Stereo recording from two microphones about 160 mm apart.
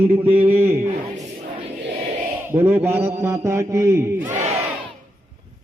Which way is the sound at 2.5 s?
15° right (ahead or behind).